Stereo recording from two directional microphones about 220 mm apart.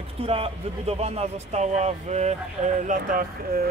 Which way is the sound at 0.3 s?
25° right (ahead or behind).